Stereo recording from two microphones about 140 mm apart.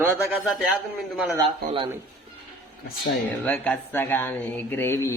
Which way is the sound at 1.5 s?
40° right (ahead or behind).